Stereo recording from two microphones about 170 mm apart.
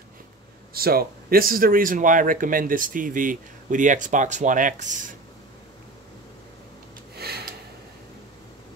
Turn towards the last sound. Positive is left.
turn(degrees=-70)  # may be behind; listen again after turning